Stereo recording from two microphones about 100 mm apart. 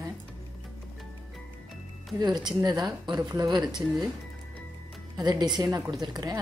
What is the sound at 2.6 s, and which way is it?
Speech, 40° right (ahead or behind).